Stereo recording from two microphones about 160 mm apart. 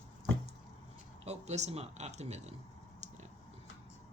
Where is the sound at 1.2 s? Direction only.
45° right (ahead or behind).